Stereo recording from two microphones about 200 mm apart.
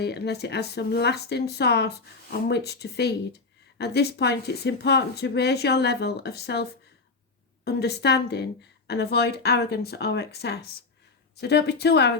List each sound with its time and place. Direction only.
0.0 s speech: 55° left (ahead or behind)